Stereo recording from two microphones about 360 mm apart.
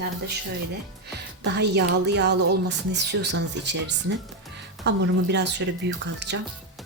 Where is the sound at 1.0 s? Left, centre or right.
Right.